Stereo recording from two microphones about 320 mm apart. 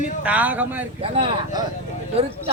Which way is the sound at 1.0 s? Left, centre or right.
Centre.